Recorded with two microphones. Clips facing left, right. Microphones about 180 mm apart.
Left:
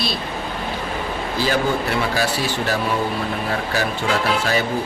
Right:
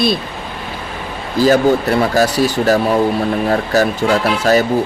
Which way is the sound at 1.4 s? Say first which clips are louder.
Right 10 dB; 40° right (ahead or behind).